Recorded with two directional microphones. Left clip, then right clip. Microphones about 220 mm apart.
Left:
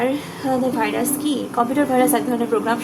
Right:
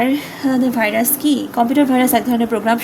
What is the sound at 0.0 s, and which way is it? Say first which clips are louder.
Speech: right 4 dB; 55° right (ahead or behind).